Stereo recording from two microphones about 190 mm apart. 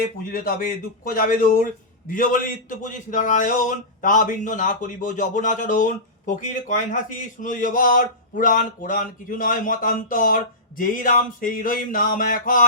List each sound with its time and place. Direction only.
0.3 s a man's voice: 45° left (ahead or behind)